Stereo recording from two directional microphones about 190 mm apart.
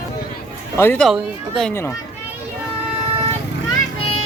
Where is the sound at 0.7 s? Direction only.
10° left (ahead or behind).